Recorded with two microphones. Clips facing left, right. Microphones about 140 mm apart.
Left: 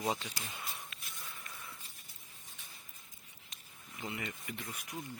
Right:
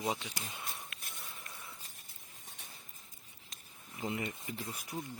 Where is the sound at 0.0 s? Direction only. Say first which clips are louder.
Even; 10° right (ahead or behind).